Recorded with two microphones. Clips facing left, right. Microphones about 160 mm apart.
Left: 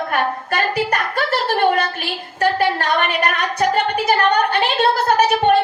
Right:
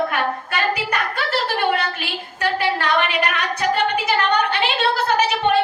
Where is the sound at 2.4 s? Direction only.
45° left (ahead or behind).